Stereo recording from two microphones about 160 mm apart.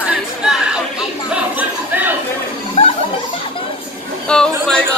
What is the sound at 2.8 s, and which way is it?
Chuckle, 40° left (ahead or behind).